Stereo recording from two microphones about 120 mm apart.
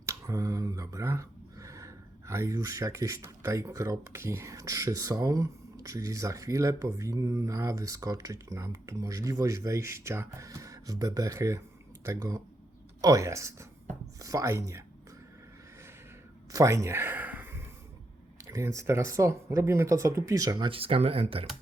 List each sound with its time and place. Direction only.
0.0 s speech: 25° right (ahead or behind)
16.5 s a sound: 25° right (ahead or behind)
18.4 s speech: 25° right (ahead or behind)
20.7 s speech: 50° right (ahead or behind)